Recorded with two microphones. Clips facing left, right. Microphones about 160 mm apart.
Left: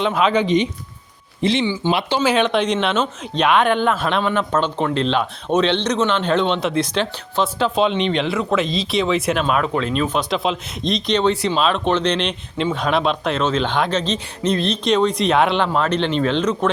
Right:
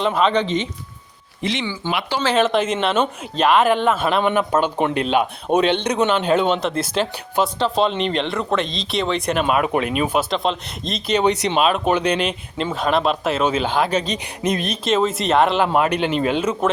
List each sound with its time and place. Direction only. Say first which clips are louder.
0.0 s speech: even; centre (ahead or behind)
0.4 s speech: left 5 dB; 15° left (ahead or behind)
1.4 s speech: left 6 dB; 30° left (ahead or behind)
2.3 s speech: right 3 dB; centre (ahead or behind)
9.4 s speech: right 1 dB; 10° right (ahead or behind)